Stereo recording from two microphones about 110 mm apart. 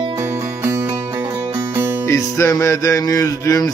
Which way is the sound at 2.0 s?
30° left (ahead or behind).